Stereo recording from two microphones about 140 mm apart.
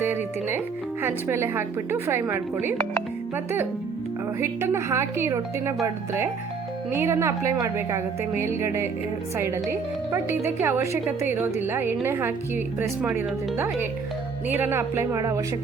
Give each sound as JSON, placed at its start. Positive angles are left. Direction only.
{"t": 0.0, "sound": "a woman's voice", "side_deg": -15}